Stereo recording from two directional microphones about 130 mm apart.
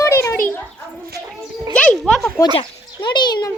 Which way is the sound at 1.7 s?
10° left (ahead or behind).